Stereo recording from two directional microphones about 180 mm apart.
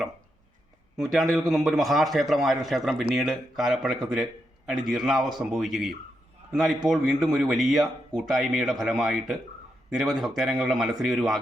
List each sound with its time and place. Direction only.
0.9 s a man's voice: centre (ahead or behind)